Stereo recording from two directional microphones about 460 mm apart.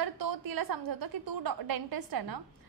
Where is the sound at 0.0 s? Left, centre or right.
Right.